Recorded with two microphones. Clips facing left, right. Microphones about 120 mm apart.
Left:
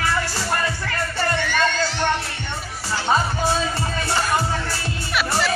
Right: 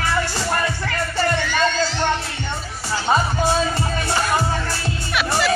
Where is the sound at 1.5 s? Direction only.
60° left (ahead or behind).